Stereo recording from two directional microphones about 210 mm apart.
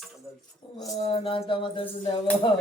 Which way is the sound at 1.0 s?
30° left (ahead or behind).